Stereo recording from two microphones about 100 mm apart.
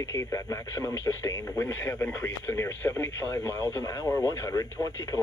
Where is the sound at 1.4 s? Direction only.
20° left (ahead or behind).